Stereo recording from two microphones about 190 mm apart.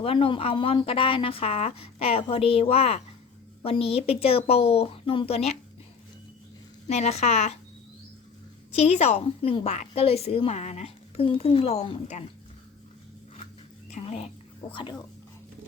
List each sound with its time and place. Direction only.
0.0 s a woman's voice: 30° left (ahead or behind)
6.8 s a woman's voice: 35° left (ahead or behind)
8.7 s a woman's voice: 35° left (ahead or behind)
13.9 s speech: 35° left (ahead or behind)